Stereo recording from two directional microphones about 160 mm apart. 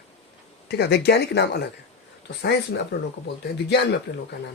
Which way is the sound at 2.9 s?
90° left.